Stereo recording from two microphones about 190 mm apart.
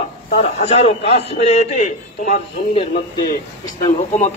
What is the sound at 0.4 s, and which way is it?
A man's voice, 35° left (ahead or behind).